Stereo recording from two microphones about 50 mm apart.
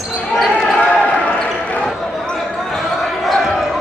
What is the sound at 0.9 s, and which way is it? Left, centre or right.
Basketball bounce, left.